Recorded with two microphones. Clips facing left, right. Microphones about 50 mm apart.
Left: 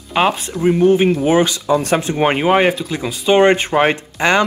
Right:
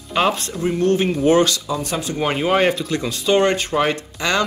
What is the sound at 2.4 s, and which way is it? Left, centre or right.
Speech, left.